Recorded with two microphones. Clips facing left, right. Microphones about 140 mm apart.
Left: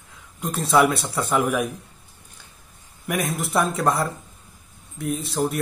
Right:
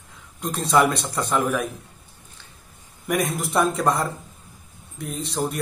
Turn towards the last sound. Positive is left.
turn(degrees=0)  # may be behind; listen again after turning